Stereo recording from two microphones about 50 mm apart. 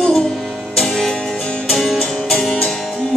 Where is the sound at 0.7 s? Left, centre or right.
Centre.